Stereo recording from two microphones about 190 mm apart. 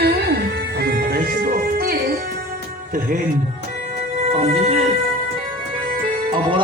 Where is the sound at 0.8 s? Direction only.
55° right (ahead or behind).